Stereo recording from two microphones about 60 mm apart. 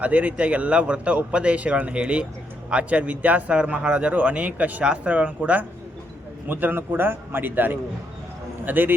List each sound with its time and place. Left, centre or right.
0.0 s a man's voice: right